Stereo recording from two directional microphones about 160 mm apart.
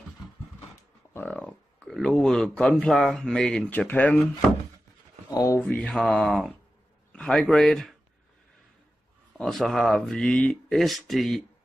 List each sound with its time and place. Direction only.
1.1 s speech: 10° left (ahead or behind)
5.3 s speech: 20° left (ahead or behind)
5.6 s speech: 5° left (ahead or behind)
9.4 s speech: centre (ahead or behind)